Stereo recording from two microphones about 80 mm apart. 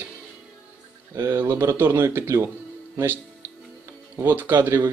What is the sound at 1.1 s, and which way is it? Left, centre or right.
Speech, right.